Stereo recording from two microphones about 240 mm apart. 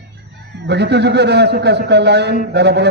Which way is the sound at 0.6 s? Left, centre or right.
Right.